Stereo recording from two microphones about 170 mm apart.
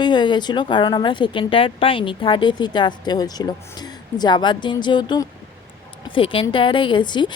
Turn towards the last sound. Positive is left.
turn(degrees=25)  # may be behind; listen again after turning